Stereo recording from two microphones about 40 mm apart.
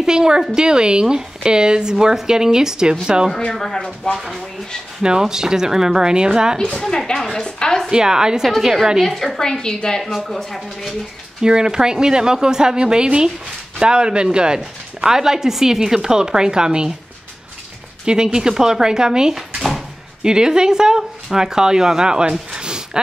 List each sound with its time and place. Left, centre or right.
0.0 s a woman's voice: centre
3.6 s a woman's voice: centre
5.0 s speech: centre
7.2 s a woman's voice: centre
7.4 s a woman's voice: left
7.9 s speech: centre
9.0 s a woman's voice: centre
10.1 s speech: centre
11.4 s speech: centre
18.0 s speech: centre
22.5 s a sound: right